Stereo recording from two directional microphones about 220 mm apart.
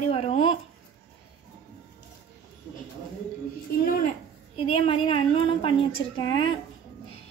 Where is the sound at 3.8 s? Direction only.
40° left (ahead or behind).